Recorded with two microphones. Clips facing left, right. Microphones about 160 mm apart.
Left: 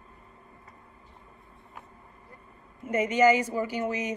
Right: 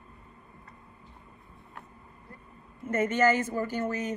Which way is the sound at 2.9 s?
10° left (ahead or behind).